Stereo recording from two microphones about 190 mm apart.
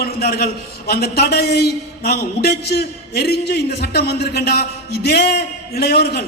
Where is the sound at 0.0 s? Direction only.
55° left (ahead or behind).